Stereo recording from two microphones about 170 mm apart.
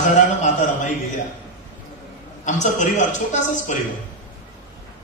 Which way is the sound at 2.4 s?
45° left (ahead or behind).